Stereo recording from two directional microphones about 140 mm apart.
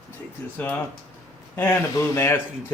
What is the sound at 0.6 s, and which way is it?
Speech, 10° left (ahead or behind).